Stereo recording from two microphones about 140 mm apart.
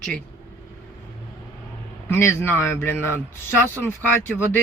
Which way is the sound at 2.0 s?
15° left (ahead or behind).